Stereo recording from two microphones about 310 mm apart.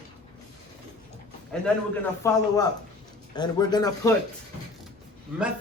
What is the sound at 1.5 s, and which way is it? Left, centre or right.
A man's voice, centre.